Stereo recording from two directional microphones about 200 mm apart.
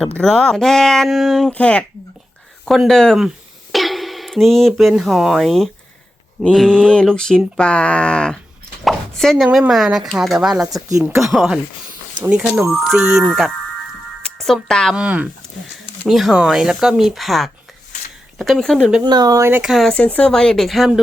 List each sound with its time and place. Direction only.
0.2 s speech: centre (ahead or behind)
19.0 s speech: 20° right (ahead or behind); by 21.0 s centre (ahead or behind)